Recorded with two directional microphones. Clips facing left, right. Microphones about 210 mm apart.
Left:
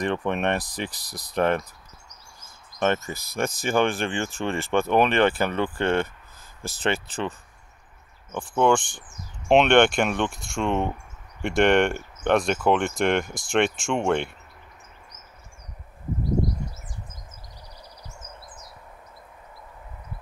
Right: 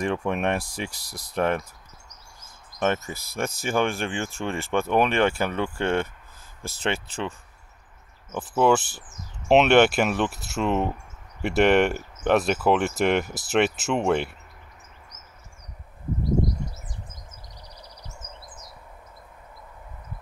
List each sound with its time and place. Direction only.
0.0 s speech: 5° right (ahead or behind)
1.0 s speech: 15° left (ahead or behind)
1.3 s speech: centre (ahead or behind)
2.8 s speech: 5° right (ahead or behind)